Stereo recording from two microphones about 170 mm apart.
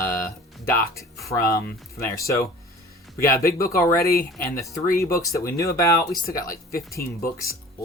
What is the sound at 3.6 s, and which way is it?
Speech, 60° left (ahead or behind).